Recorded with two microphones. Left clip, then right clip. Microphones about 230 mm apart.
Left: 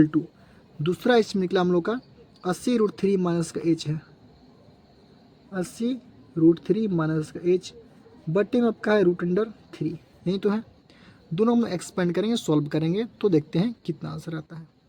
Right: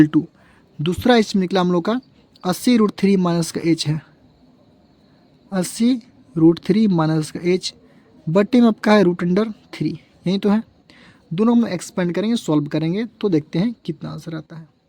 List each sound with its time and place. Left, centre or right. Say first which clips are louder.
0.8 s speech: right 5 dB; right
5.5 s speech: right 9 dB; right